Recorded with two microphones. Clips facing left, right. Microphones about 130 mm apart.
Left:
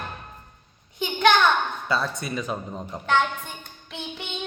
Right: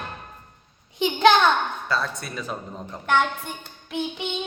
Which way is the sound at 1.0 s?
25° right (ahead or behind).